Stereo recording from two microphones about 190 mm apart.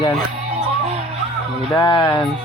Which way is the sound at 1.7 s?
25° left (ahead or behind).